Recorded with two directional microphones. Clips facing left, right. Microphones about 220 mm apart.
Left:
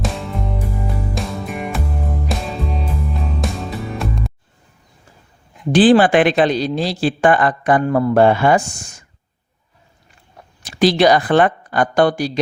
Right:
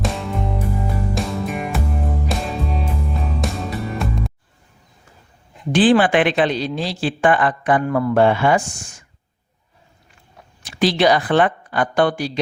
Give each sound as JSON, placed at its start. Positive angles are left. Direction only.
{"t": 0.0, "sound": "music", "side_deg": 0}
{"t": 5.7, "sound": "speech", "side_deg": 35}
{"t": 10.6, "sound": "speech", "side_deg": 40}